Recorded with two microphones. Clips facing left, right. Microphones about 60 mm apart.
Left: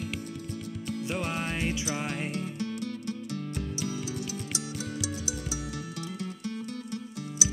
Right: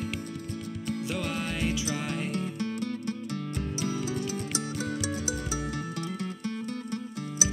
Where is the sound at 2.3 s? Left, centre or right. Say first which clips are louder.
Right 2 dB; right.